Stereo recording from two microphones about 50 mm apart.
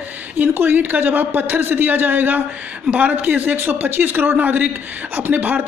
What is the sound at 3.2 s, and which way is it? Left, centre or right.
Speech, right.